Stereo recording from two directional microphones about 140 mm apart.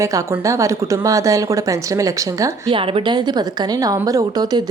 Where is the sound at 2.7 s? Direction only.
40° right (ahead or behind).